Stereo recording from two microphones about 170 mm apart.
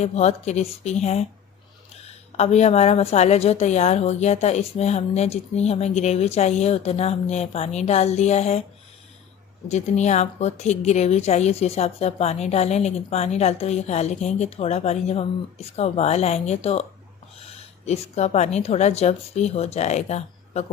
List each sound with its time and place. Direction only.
0.0 s a woman's voice: 40° left (ahead or behind)
9.6 s a woman's voice: 40° left (ahead or behind)